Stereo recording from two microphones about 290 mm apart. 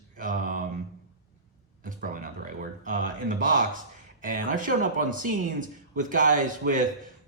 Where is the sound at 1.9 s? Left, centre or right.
Right.